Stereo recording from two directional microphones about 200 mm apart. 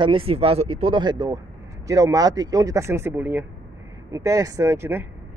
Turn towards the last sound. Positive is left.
turn(degrees=-10)  # may be behind; listen again after turning